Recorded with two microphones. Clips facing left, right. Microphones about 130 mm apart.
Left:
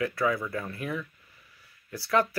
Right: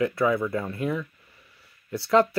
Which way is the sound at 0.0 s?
25° right (ahead or behind).